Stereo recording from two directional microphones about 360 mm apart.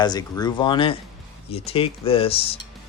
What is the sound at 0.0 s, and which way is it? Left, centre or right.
Speech, centre.